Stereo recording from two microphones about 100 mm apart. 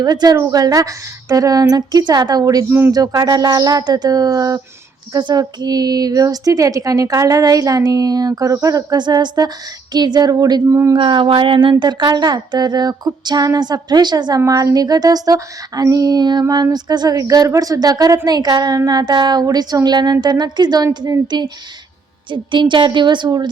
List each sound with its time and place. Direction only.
0.0 s speech: 40° right (ahead or behind)
2.6 s speech: 20° right (ahead or behind)
2.9 s speech: 40° right (ahead or behind)
10.7 s speech: 25° right (ahead or behind)
10.9 s speech: 55° right (ahead or behind)